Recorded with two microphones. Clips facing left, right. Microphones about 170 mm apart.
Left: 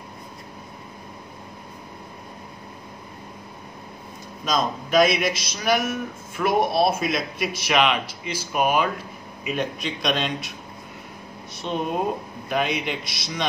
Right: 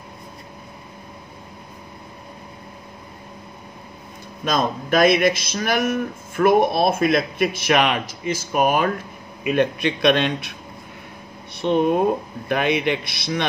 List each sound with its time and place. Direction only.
4.5 s a man's voice: 55° right (ahead or behind)
9.5 s a man's voice: 65° right (ahead or behind)
11.5 s a sound: 65° right (ahead or behind)
12.4 s a man's voice: 60° right (ahead or behind)